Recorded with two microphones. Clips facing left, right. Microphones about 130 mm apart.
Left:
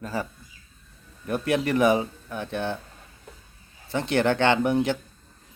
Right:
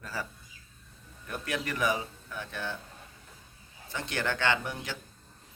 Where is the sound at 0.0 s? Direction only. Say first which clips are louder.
Left 8 dB; 25° left (ahead or behind).